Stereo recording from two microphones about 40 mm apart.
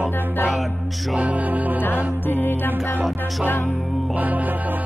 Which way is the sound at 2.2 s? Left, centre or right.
Left.